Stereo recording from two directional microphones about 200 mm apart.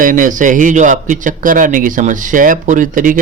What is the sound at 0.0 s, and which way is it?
Speech, 40° right (ahead or behind).